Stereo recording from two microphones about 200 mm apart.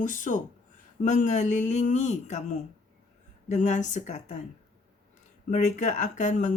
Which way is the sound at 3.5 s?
35° left (ahead or behind).